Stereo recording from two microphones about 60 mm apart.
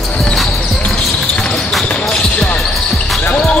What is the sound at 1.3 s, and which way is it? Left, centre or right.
Basketball bounce, centre.